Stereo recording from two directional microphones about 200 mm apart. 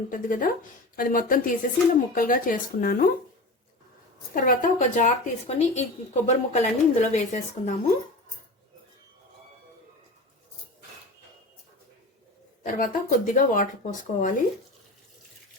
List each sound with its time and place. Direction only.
0.1 s speech: 40° left (ahead or behind)
4.4 s speech: 40° left (ahead or behind)
12.6 s speech: 40° left (ahead or behind)